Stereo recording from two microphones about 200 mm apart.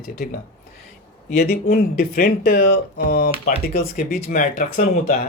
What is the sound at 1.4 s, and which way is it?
Speech, 45° left (ahead or behind).